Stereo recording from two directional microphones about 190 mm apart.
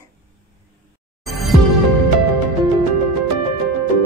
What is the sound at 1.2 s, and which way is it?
Music, centre (ahead or behind).